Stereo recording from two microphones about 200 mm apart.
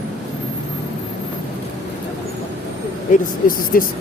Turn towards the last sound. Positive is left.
turn(degrees=45)  # may be behind; listen again after turning